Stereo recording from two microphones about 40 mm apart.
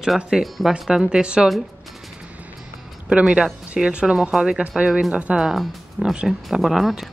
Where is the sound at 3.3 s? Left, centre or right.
Right.